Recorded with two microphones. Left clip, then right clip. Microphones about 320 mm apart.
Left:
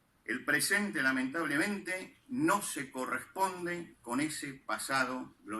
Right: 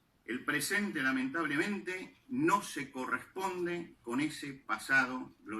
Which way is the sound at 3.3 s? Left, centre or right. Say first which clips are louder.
Left 2 dB; centre.